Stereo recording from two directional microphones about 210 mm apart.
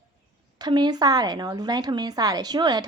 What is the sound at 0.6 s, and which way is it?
A woman's voice, 20° right (ahead or behind).